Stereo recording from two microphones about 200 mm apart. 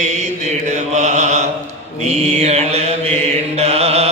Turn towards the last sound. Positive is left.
turn(degrees=-30)  # may be behind; listen again after turning